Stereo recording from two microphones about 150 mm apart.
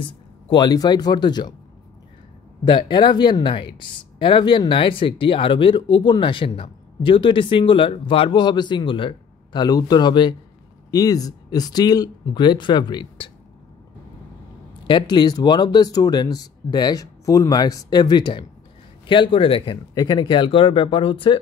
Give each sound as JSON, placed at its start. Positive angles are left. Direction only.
{"t": 0.0, "sound": "speech", "side_deg": 30}
{"t": 2.6, "sound": "speech", "side_deg": 30}
{"t": 14.9, "sound": "speech", "side_deg": 30}
{"t": 19.9, "sound": "speech", "side_deg": 25}